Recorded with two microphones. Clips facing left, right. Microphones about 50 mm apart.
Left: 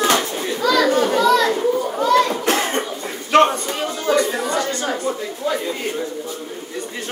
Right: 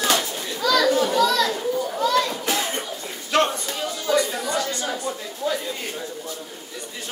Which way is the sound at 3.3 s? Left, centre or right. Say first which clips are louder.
Left 7 dB; left.